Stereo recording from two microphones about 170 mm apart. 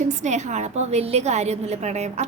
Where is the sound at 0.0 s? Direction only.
45° right (ahead or behind).